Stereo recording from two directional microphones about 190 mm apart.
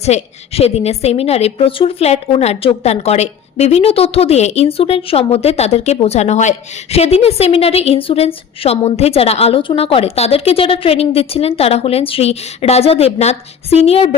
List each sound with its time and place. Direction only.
0.0 s a woman's voice: 35° left (ahead or behind)